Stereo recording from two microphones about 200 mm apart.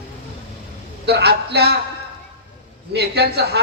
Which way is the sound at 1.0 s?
55° right (ahead or behind).